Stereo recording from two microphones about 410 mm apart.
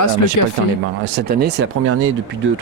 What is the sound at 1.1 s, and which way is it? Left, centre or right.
Speech, right.